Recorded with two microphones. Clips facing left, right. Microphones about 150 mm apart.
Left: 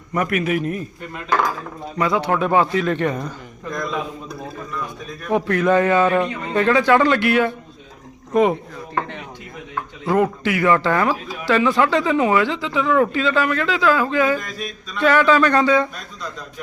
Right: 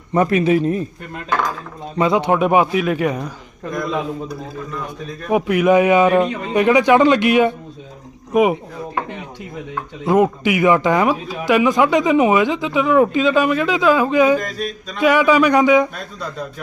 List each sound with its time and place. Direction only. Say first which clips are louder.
0.1 s speech: right 6 dB; 30° right (ahead or behind)
2.0 s speech: right 4 dB; 20° right (ahead or behind)
5.3 s speech: right 3 dB; 10° right (ahead or behind)
10.1 s speech: right 3 dB; 15° right (ahead or behind)
14.3 s mantra: right 6 dB; 40° right (ahead or behind)
14.9 s speech: right 2 dB; 10° right (ahead or behind)